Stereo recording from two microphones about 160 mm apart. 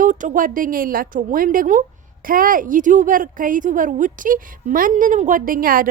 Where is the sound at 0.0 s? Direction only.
55° right (ahead or behind).